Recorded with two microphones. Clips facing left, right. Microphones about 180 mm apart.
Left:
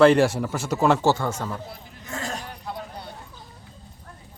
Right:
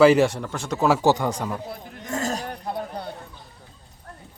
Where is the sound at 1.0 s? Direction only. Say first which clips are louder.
Right 2 dB; 15° right (ahead or behind).